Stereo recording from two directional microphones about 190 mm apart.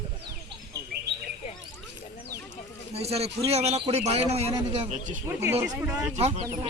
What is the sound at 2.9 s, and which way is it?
A man's voice, 35° right (ahead or behind).